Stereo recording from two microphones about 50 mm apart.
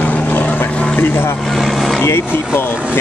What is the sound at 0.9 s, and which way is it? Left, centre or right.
Speech, left.